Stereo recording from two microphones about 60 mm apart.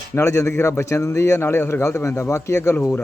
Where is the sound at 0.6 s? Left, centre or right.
Left.